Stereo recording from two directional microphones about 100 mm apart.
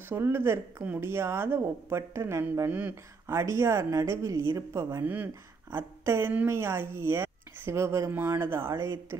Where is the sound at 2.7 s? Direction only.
15° right (ahead or behind).